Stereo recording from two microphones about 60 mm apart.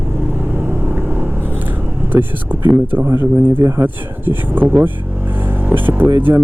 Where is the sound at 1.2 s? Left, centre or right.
Right.